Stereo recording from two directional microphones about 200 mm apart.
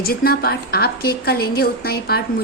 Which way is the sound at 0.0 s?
50° left (ahead or behind).